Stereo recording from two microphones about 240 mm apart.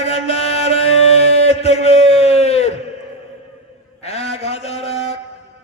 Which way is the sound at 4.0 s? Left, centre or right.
Left.